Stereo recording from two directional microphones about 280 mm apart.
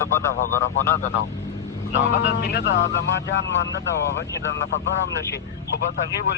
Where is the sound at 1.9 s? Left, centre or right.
Left.